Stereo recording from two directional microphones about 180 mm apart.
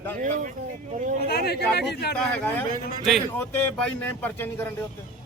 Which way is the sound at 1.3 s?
60° left (ahead or behind).